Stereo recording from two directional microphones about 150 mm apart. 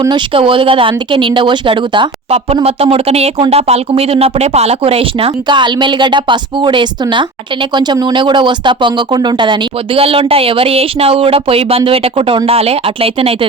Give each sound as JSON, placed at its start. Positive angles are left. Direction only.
{"t": 0.0, "sound": "speech", "side_deg": -35}